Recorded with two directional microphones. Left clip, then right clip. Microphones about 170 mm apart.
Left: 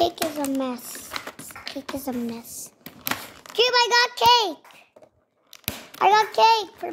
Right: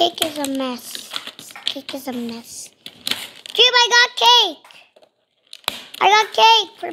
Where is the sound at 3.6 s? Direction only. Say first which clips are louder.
Right 6 dB; 5° left (ahead or behind).